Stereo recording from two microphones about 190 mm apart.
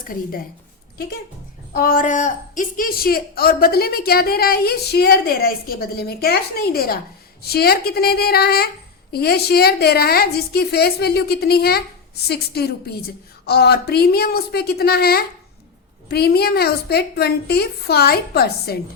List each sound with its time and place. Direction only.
0.0 s a woman's voice: 50° left (ahead or behind)
1.7 s a woman's voice: 50° left (ahead or behind)